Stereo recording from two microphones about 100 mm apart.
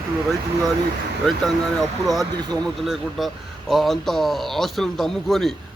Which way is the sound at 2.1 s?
45° right (ahead or behind).